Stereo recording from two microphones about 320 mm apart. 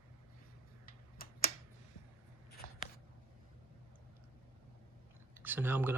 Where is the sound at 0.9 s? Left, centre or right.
Left.